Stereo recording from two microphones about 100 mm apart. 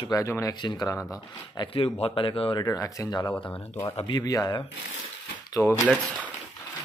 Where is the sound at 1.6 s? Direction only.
65° left (ahead or behind).